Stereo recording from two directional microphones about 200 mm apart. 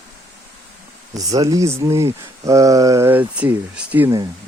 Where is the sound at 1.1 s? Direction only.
15° right (ahead or behind).